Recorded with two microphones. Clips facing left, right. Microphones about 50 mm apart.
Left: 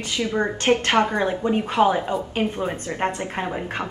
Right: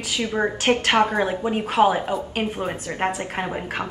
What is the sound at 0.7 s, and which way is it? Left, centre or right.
Speech, right.